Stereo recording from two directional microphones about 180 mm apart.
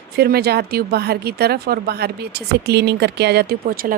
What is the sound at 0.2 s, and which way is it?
A woman's voice, 60° right (ahead or behind).